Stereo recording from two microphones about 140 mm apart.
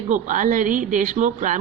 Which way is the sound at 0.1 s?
65° right (ahead or behind).